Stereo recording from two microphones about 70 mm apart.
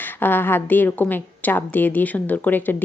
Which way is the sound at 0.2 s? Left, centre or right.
Left.